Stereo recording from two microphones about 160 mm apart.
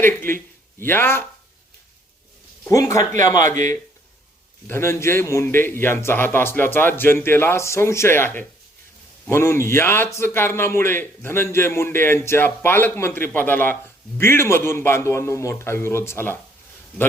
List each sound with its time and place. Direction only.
0.0 s speech: 15° left (ahead or behind)
2.6 s speech: 20° left (ahead or behind)
4.6 s a man's voice: 15° left (ahead or behind)